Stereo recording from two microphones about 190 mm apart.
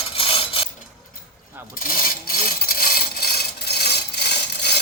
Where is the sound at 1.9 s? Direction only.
50° left (ahead or behind).